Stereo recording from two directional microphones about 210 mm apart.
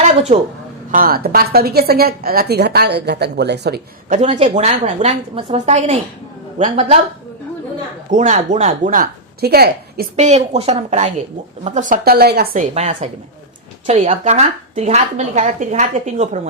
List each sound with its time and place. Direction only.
0.3 s a woman's voice: 30° right (ahead or behind)
0.9 s a woman's voice: 45° right (ahead or behind)
4.1 s a woman's voice: 35° right (ahead or behind)
8.1 s a woman's voice: 35° right (ahead or behind)
10.2 s a woman's voice: 30° right (ahead or behind); by 12.6 s 50° right (ahead or behind)
12.7 s a woman's voice: 35° right (ahead or behind)